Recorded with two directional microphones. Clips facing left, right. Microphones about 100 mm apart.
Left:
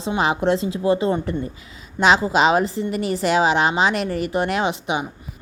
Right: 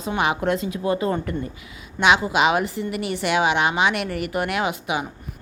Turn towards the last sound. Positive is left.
turn(degrees=25)  # may be behind; listen again after turning